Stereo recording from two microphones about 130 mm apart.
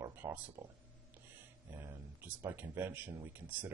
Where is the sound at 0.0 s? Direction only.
15° right (ahead or behind).